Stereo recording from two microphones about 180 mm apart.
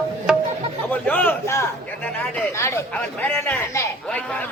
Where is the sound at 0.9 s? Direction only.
10° left (ahead or behind).